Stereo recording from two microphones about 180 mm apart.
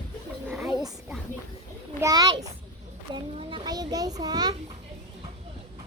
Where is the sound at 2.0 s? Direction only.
20° right (ahead or behind).